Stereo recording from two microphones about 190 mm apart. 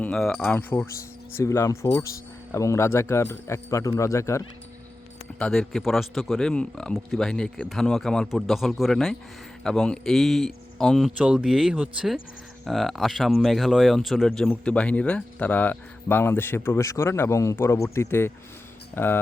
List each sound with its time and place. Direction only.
0.0 s speech: 5° left (ahead or behind)
5.4 s speech: 5° left (ahead or behind)